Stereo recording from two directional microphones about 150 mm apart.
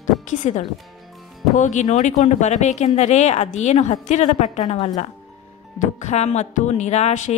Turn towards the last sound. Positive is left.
turn(degrees=50)  # may be behind; listen again after turning